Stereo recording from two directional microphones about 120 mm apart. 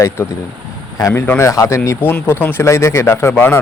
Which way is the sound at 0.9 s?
25° left (ahead or behind).